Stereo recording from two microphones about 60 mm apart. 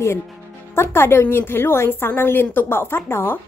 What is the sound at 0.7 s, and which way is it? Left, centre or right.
A woman's voice, left.